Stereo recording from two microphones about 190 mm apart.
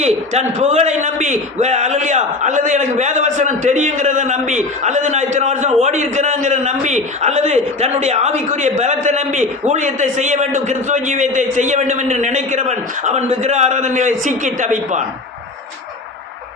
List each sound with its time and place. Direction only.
0.0 s a man's voice: 35° right (ahead or behind)